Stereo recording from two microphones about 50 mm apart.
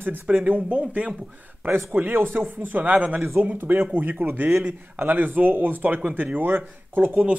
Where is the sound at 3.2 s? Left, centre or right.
Right.